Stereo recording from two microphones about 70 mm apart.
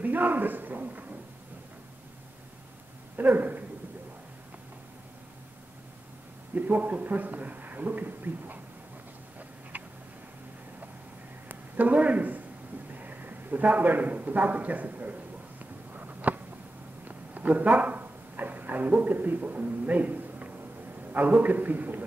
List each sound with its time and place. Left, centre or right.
0.0 s a man's voice: right
3.2 s speech: right
6.5 s a man's voice: right
11.4 s a sound: right
12.9 s a man's voice: right
15.6 s a sound: right
17.3 s a man's voice: right